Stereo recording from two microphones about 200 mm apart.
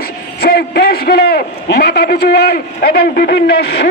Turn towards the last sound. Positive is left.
turn(degrees=55)  # may be behind; listen again after turning